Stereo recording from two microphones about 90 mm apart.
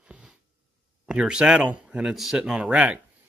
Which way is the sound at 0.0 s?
10° right (ahead or behind).